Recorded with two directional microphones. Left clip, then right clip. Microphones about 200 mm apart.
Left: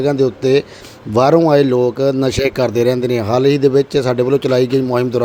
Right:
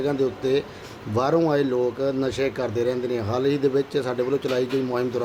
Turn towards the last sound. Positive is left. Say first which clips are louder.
# left 9 dB
turn(degrees=35)  # may be behind; listen again after turning